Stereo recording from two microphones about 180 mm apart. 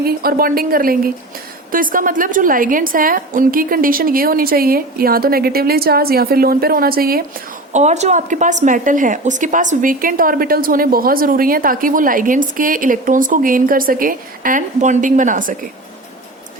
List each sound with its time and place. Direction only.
0.0 s a woman's voice: 55° right (ahead or behind)